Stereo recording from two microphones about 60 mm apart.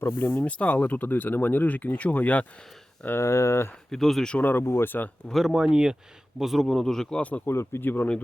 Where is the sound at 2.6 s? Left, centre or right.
Centre.